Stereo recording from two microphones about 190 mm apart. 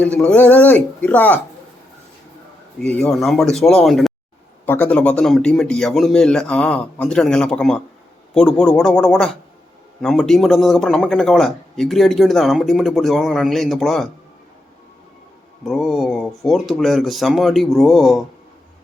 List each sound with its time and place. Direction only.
0.0 s speech: 5° left (ahead or behind)
2.8 s speech: 5° left (ahead or behind)
15.6 s speech: centre (ahead or behind)